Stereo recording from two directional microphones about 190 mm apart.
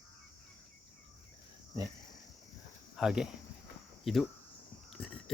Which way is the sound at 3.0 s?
5° right (ahead or behind).